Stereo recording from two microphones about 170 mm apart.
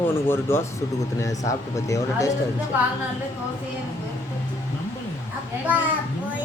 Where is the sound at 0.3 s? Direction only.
15° left (ahead or behind).